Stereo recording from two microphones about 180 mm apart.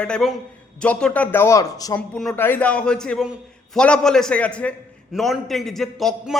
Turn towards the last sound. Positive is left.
turn(degrees=0)  # may be behind; listen again after turning